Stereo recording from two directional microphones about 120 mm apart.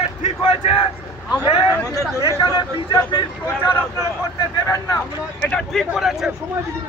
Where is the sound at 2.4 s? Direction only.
40° left (ahead or behind).